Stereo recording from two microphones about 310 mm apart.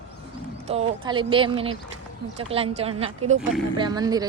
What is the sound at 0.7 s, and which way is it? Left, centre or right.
A woman's voice, centre.